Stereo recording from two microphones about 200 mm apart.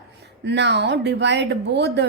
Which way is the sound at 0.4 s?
60° right (ahead or behind).